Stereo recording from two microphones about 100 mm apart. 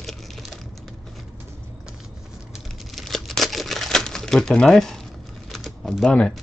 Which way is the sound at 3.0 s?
Centre (ahead or behind).